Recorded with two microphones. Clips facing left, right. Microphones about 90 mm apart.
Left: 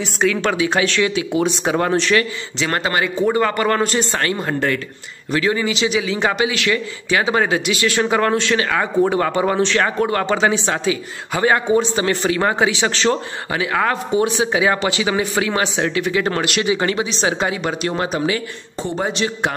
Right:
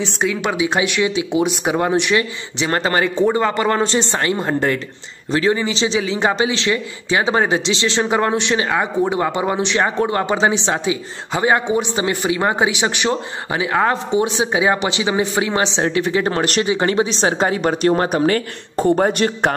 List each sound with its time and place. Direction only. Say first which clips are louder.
0.0 s a man's voice: left 2 dB; 15° right (ahead or behind); by 18.0 s 40° right (ahead or behind)
18.0 s a woman's voice: right 4 dB; 50° right (ahead or behind)